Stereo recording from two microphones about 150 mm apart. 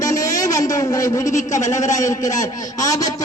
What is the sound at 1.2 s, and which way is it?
Speech, 55° left (ahead or behind).